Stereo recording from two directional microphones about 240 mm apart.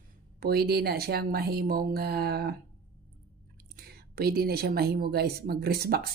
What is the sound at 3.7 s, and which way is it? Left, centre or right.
Speech, right.